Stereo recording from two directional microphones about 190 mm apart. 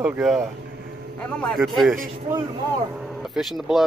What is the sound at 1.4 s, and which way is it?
Speech, centre (ahead or behind).